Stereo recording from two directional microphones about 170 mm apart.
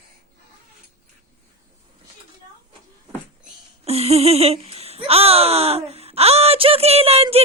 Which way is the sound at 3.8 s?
35° right (ahead or behind).